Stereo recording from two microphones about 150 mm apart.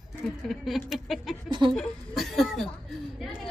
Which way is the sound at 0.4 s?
Centre (ahead or behind).